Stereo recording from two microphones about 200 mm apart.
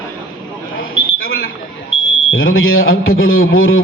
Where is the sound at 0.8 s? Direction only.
90° left.